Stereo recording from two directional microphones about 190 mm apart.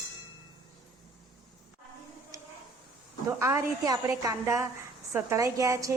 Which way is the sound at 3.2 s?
15° right (ahead or behind).